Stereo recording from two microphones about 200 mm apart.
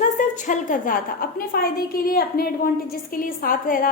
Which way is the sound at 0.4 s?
40° left (ahead or behind).